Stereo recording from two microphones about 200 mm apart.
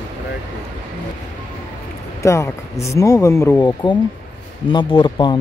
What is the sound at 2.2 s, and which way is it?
Speech, 15° left (ahead or behind).